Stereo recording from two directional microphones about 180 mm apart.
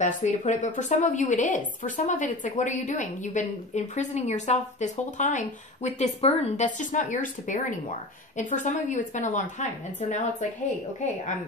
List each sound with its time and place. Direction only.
0.0 s a woman's voice: 40° left (ahead or behind)